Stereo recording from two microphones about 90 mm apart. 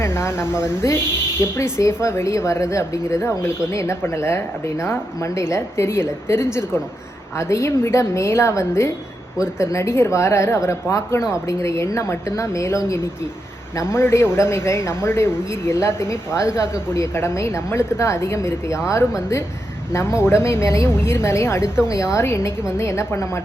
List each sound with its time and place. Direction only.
0.0 s speech: 30° left (ahead or behind)
19.9 s speech: 30° left (ahead or behind)